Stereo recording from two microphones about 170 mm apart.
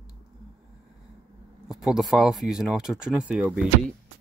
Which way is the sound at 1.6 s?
5° right (ahead or behind).